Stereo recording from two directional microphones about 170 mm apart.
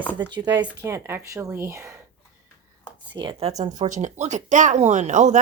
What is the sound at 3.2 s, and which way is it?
Speech, 30° right (ahead or behind).